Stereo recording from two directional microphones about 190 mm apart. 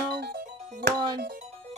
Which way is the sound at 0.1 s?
55° right (ahead or behind).